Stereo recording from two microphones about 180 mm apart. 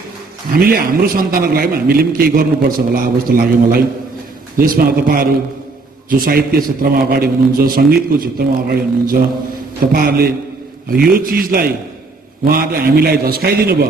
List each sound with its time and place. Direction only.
0.5 s a man's voice: 55° right (ahead or behind)